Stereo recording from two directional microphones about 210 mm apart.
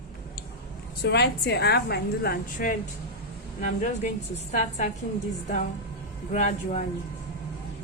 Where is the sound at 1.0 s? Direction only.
55° left (ahead or behind); by 4.8 s 35° left (ahead or behind).